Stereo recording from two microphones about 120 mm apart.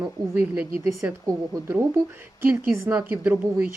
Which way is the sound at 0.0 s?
10° right (ahead or behind).